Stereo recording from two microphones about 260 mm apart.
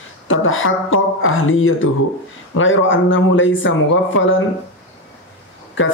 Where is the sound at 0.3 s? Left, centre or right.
Left.